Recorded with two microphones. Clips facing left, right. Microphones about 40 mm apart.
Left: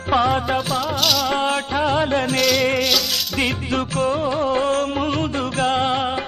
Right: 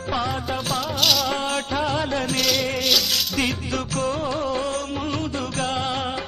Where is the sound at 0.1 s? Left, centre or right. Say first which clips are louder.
Left 8 dB; left.